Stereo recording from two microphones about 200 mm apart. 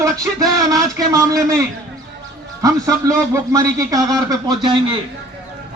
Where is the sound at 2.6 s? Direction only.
15° right (ahead or behind).